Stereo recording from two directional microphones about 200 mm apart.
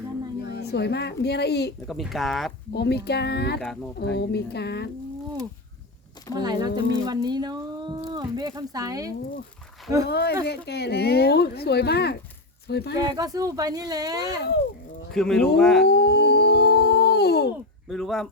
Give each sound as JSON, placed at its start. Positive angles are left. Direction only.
{"t": 0.4, "sound": "speech", "side_deg": 55}
{"t": 1.9, "sound": "speech", "side_deg": 0}
{"t": 2.7, "sound": "speech", "side_deg": 55}
{"t": 6.4, "sound": "speech", "side_deg": -20}
{"t": 10.1, "sound": "speech", "side_deg": 55}
{"t": 13.1, "sound": "speech", "side_deg": -15}
{"t": 15.1, "sound": "speech", "side_deg": 5}
{"t": 15.9, "sound": "howl", "side_deg": 55}
{"t": 17.8, "sound": "speech", "side_deg": 0}